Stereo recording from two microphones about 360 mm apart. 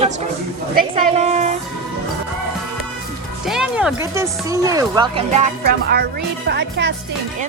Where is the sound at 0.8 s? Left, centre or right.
Centre.